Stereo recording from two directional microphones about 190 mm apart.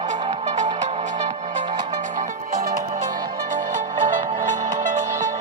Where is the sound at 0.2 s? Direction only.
25° right (ahead or behind).